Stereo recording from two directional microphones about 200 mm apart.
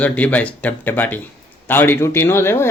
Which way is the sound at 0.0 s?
5° left (ahead or behind).